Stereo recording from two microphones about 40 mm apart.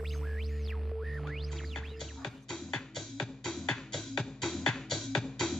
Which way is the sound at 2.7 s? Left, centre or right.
Centre.